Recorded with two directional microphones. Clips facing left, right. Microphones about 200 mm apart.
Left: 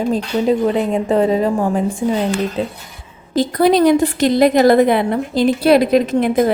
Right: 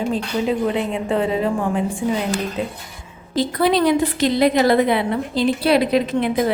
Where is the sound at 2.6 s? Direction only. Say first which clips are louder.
Left 4 dB; 30° left (ahead or behind).